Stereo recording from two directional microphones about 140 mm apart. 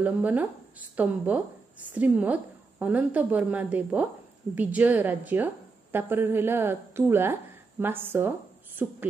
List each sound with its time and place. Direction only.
0.0 s a woman's voice: 10° right (ahead or behind)